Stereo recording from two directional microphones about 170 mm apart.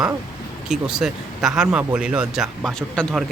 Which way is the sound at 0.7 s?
5° right (ahead or behind).